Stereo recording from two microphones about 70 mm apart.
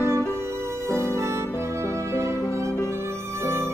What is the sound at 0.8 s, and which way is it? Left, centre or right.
Music, right.